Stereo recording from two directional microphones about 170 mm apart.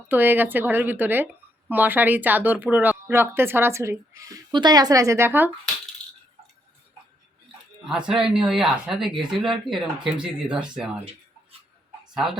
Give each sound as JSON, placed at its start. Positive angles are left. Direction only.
{"t": 0.1, "sound": "a woman's voice", "side_deg": -10}
{"t": 7.9, "sound": "speech", "side_deg": -5}
{"t": 12.1, "sound": "speech", "side_deg": 0}